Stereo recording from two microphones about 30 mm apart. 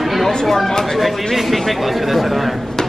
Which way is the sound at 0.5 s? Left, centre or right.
Centre.